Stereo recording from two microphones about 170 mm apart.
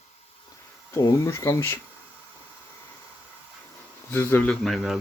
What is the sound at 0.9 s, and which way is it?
Speech, 20° left (ahead or behind).